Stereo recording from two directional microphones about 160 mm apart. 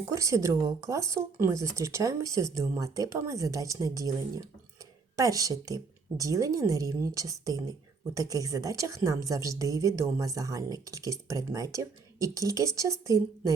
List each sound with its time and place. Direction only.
0.0 s a woman's voice: 20° right (ahead or behind)